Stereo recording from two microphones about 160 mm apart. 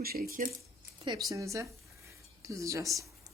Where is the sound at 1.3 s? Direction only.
20° right (ahead or behind).